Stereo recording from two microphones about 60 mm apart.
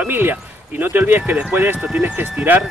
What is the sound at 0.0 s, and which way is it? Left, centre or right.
Speech, right.